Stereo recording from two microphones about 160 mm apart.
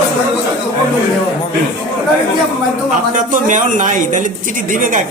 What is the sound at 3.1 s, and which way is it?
Speech, 55° right (ahead or behind).